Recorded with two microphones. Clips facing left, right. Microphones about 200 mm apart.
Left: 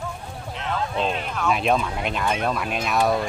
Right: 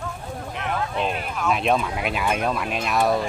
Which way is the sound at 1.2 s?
5° right (ahead or behind).